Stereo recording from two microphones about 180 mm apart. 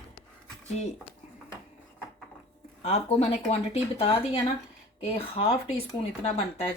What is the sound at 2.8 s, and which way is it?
Speech, 35° left (ahead or behind).